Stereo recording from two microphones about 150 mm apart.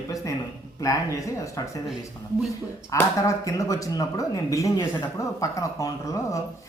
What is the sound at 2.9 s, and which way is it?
Speech, 20° left (ahead or behind).